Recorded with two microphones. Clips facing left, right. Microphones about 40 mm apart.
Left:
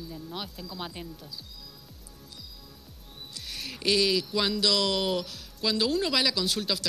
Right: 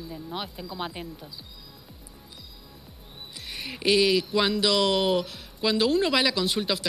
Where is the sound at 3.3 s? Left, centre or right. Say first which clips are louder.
Right 2 dB; centre.